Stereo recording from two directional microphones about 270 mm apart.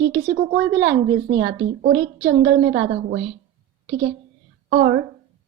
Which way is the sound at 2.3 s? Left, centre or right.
Right.